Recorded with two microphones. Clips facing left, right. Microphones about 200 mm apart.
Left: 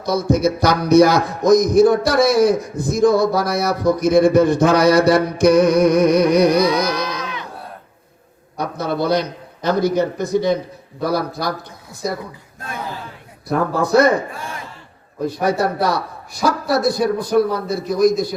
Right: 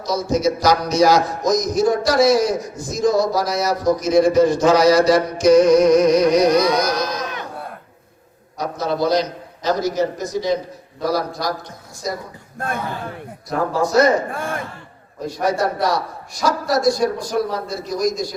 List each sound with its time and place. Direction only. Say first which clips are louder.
0.0 s music: left 2 dB; 60° left (ahead or behind)
8.5 s a man's voice: even; 60° left (ahead or behind)
11.0 s music: left 1 dB; 60° left (ahead or behind)
12.5 s a man's voice: right 4 dB; 55° right (ahead or behind)
13.5 s music: left 2 dB; 60° left (ahead or behind)
14.3 s a man's voice: right 5 dB; 55° right (ahead or behind)
15.4 s music: even; 60° left (ahead or behind)